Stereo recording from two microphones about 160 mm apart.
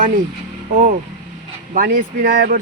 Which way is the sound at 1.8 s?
70° right (ahead or behind).